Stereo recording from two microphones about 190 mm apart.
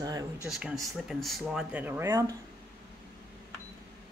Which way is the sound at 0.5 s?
5° right (ahead or behind).